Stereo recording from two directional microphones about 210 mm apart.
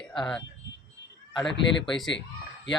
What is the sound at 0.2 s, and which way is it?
A man's voice, 5° left (ahead or behind).